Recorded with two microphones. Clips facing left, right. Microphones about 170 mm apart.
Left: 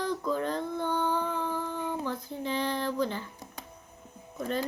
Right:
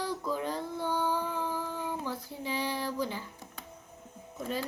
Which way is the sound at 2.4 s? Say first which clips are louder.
Left 3 dB; 10° right (ahead or behind).